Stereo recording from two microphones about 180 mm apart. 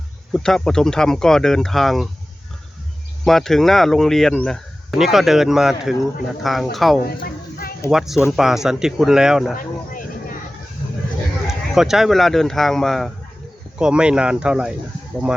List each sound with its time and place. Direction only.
0.3 s speech: 5° left (ahead or behind)
3.2 s speech: centre (ahead or behind)
9.6 s a sound: 50° left (ahead or behind)
11.4 s speech: centre (ahead or behind)